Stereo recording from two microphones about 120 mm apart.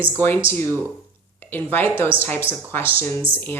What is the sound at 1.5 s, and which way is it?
Speech, 15° left (ahead or behind).